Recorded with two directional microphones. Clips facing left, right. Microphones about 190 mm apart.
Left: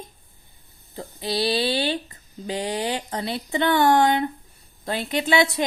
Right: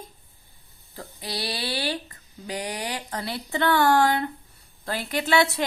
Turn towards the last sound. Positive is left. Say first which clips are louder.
# left 2 dB
turn(degrees=20)  # may be behind; listen again after turning